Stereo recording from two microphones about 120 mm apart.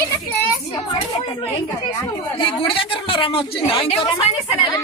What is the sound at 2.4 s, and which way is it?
Speech, 45° left (ahead or behind).